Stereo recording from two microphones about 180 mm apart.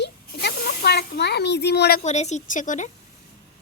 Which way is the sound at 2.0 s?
40° left (ahead or behind).